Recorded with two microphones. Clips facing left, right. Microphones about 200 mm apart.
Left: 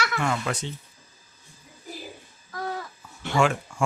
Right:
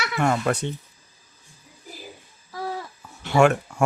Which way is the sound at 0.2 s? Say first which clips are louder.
Right 5 dB; 55° right (ahead or behind).